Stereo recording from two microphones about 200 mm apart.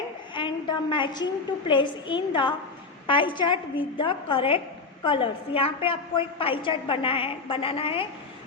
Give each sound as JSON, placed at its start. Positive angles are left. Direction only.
{"t": 0.3, "sound": "a woman's voice", "side_deg": 25}